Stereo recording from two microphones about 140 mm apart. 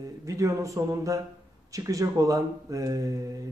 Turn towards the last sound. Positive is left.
turn(degrees=-25)  # may be behind; listen again after turning